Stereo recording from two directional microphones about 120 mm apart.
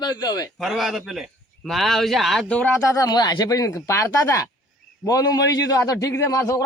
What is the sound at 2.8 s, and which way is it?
A man's voice, 30° left (ahead or behind).